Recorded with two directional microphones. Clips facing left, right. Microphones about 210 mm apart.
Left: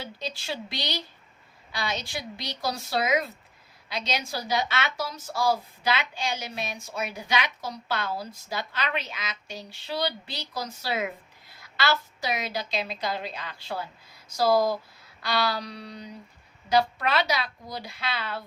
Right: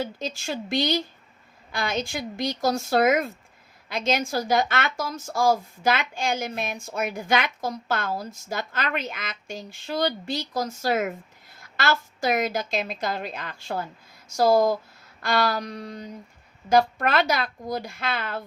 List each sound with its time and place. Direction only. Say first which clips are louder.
0.0 s speech: right 6 dB; 50° right (ahead or behind)